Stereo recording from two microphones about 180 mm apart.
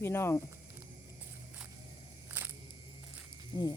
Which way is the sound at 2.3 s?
10° right (ahead or behind).